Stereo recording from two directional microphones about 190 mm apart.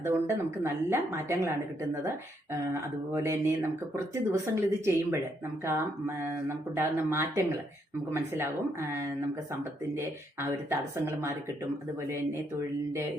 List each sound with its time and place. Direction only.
0.0 s speech: 15° right (ahead or behind)
3.1 s speech: 15° right (ahead or behind)